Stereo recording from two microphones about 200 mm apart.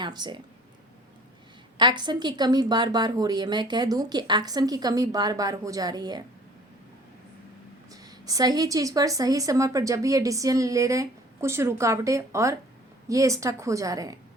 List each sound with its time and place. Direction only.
0.0 s speech: 20° right (ahead or behind)
1.8 s speech: 20° right (ahead or behind)
8.0 s a woman's voice: 20° right (ahead or behind)